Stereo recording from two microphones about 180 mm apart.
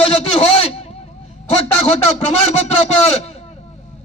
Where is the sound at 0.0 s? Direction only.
35° left (ahead or behind).